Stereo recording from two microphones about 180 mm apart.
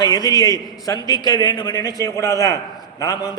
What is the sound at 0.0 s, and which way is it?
A man's voice, 20° left (ahead or behind).